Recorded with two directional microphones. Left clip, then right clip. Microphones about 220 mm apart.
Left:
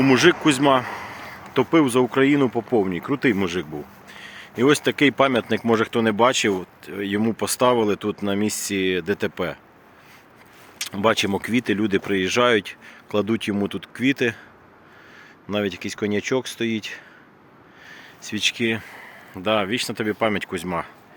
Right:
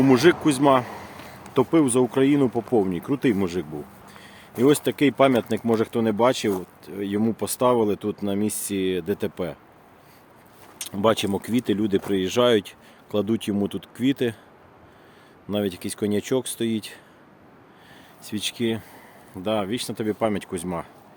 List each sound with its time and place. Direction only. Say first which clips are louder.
0.0 s speech: left 1 dB; 5° right (ahead or behind)
10.8 s speech: left 2 dB; 10° right (ahead or behind)
15.4 s speech: left 2 dB; 15° right (ahead or behind)